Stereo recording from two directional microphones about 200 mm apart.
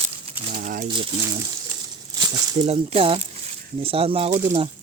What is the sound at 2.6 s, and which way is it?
Speech, 30° right (ahead or behind).